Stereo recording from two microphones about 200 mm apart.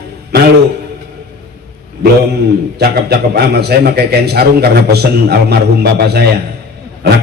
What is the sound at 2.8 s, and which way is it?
A man's voice, 50° right (ahead or behind).